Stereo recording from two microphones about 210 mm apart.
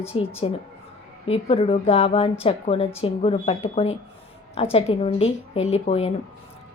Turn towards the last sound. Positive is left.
turn(degrees=30)  # may be behind; listen again after turning